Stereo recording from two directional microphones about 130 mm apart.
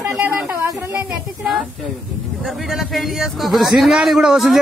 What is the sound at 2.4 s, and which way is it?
A man's voice, centre (ahead or behind).